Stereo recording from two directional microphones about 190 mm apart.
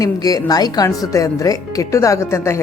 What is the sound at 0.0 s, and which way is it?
Speech, 20° left (ahead or behind).